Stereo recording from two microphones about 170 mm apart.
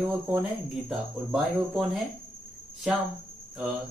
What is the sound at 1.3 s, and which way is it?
Speech, centre (ahead or behind).